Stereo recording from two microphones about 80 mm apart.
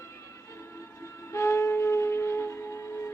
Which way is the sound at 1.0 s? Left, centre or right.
Left.